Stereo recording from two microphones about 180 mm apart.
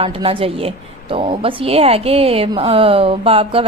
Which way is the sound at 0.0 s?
30° right (ahead or behind).